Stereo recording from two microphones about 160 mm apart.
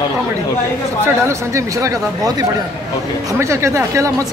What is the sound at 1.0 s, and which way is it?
Speech, 20° right (ahead or behind).